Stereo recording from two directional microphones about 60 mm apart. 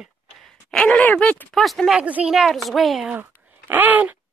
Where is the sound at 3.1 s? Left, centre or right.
Right.